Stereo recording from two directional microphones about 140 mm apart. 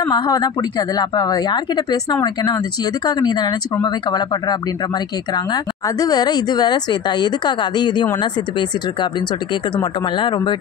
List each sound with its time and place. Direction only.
0.1 s speech: 30° left (ahead or behind)